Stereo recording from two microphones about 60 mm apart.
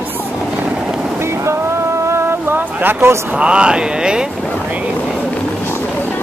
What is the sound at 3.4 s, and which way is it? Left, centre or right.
Speech, centre.